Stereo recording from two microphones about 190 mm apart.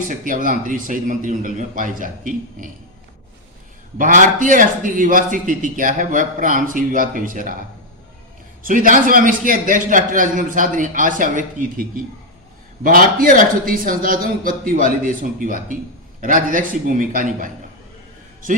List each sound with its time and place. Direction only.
0.1 s a man's voice: 45° right (ahead or behind)
3.9 s a man's voice: 45° right (ahead or behind)
8.6 s a man's voice: 45° right (ahead or behind)